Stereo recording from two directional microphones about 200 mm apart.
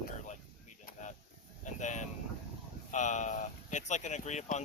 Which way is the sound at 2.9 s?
35° left (ahead or behind).